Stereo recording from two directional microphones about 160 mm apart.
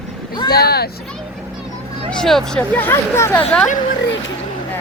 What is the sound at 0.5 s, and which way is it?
Speech, 80° left.